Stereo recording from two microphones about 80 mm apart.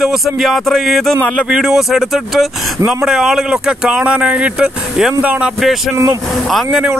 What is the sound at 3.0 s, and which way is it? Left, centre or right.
Speech, centre.